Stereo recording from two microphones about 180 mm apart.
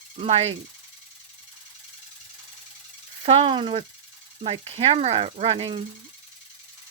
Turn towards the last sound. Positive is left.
turn(degrees=-35)  # may be behind; listen again after turning